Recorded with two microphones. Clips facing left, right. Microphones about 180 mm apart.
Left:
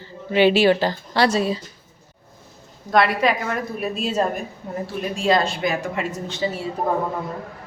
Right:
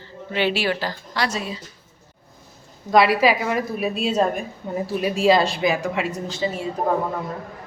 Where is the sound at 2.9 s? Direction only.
5° right (ahead or behind).